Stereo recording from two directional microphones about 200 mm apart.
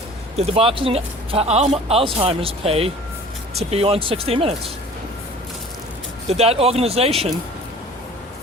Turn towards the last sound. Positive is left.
turn(degrees=-30)  # may be behind; listen again after turning